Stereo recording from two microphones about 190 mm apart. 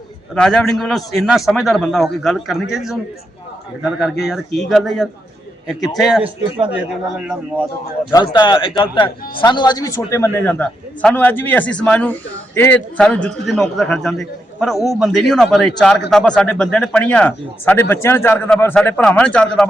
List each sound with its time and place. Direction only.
0.3 s a man's voice: 5° left (ahead or behind)
4.2 s a man's voice: centre (ahead or behind)
8.1 s a man's voice: 20° left (ahead or behind); by 19.6 s 5° left (ahead or behind)